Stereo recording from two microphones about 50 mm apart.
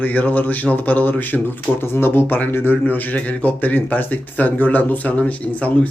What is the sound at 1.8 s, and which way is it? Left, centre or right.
Speech, left.